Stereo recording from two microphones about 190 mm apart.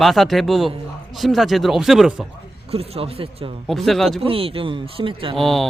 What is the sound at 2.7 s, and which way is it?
Speech, 30° right (ahead or behind).